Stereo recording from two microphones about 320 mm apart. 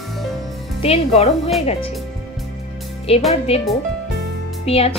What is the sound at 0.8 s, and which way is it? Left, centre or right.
Speech, centre.